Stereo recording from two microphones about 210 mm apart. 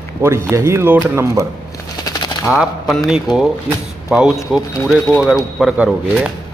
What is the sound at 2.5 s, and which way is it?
A man's voice, centre (ahead or behind).